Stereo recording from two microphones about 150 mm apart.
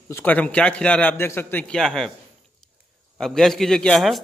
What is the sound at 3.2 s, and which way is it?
A man's voice, 5° left (ahead or behind).